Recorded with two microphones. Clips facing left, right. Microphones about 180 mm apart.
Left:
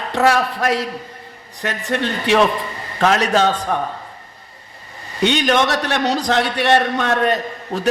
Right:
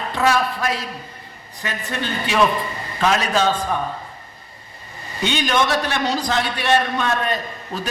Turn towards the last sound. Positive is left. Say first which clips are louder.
# left 4 dB
turn(degrees=70)  # may be behind; listen again after turning